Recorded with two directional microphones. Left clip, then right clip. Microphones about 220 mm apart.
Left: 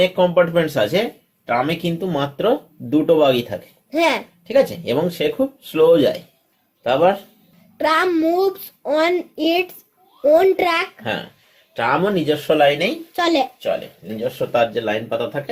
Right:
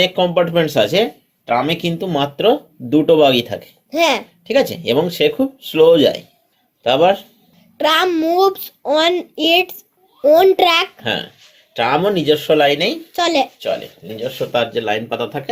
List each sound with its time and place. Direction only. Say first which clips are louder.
0.0 s a child's voice: even; 30° right (ahead or behind)
3.9 s speech: right 2 dB; 15° right (ahead or behind)
4.4 s speech: right 1 dB; 30° right (ahead or behind)
7.8 s a child's voice: right 2 dB; 20° right (ahead or behind)
11.7 s speech: right 3 dB; 30° right (ahead or behind)
13.1 s a child's voice: right 2 dB; 20° right (ahead or behind)
14.3 s speech: even; 35° right (ahead or behind)